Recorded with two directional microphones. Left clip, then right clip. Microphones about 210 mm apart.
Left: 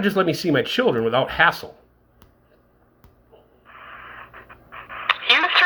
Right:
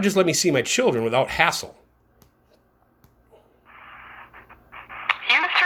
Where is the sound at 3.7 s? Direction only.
5° left (ahead or behind).